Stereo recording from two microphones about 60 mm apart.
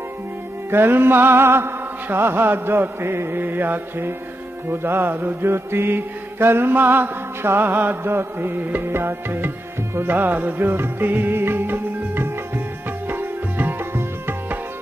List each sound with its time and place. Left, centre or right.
0.7 s mantra: right
9.9 s music: right